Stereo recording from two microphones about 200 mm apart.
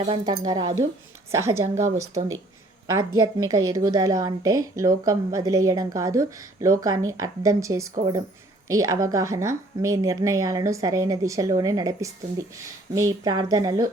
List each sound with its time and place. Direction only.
0.0 s a woman's voice: 30° right (ahead or behind)